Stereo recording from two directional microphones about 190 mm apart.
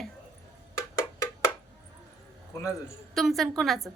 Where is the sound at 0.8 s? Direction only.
15° left (ahead or behind).